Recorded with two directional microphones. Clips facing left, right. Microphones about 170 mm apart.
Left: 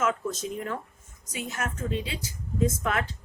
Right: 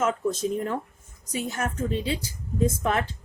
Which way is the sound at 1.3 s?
30° right (ahead or behind).